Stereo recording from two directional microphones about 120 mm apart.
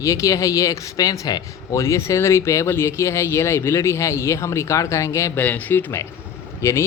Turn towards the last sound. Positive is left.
turn(degrees=20)  # may be behind; listen again after turning